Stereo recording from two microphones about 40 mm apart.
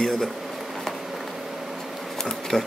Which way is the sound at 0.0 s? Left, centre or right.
Centre.